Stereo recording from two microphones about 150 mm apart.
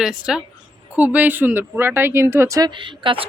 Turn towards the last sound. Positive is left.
turn(degrees=-35)  # may be behind; listen again after turning